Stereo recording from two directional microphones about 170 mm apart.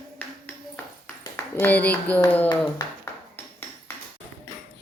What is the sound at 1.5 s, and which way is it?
Speech, 10° left (ahead or behind).